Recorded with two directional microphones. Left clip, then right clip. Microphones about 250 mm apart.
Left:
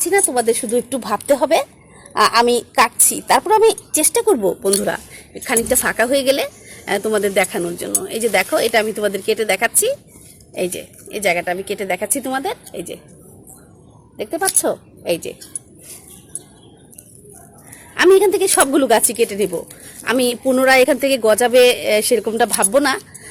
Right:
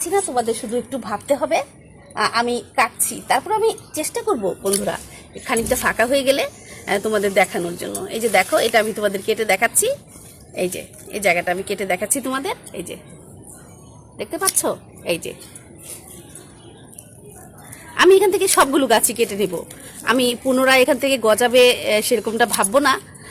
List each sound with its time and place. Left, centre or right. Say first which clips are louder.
0.0 s a woman's voice: left 4 dB; left
4.6 s a woman's voice: left 3 dB; left
14.2 s a woman's voice: left 2 dB; centre
17.9 s a woman's voice: left 1 dB; centre